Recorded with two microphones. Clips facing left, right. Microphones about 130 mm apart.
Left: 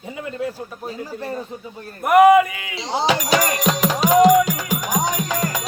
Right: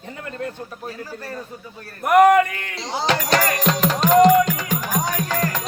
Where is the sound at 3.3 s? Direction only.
25° left (ahead or behind).